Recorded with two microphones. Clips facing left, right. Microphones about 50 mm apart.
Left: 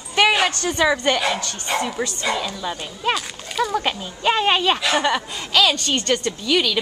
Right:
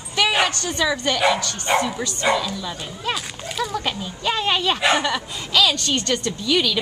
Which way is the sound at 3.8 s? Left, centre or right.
Left.